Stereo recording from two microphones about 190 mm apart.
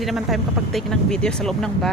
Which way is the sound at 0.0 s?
Centre (ahead or behind).